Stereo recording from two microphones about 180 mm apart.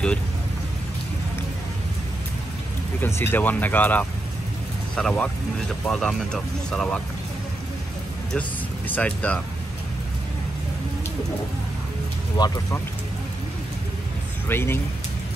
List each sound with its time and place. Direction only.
3.0 s speech: 15° left (ahead or behind)
8.3 s speech: 10° left (ahead or behind)
12.4 s speech: 20° left (ahead or behind)
14.5 s speech: 10° left (ahead or behind)